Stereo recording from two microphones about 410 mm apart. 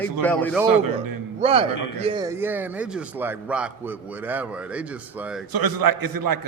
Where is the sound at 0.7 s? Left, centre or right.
Right.